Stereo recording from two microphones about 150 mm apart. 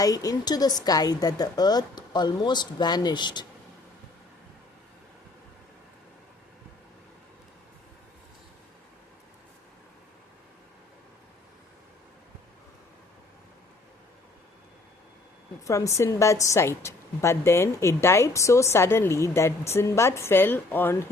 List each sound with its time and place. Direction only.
0.0 s a woman's voice: 25° left (ahead or behind)
15.6 s a woman's voice: 20° left (ahead or behind)